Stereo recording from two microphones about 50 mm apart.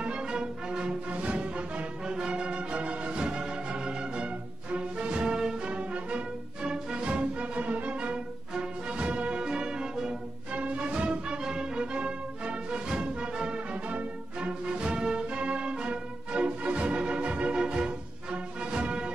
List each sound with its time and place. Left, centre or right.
0.0 s music: centre
10.5 s music: right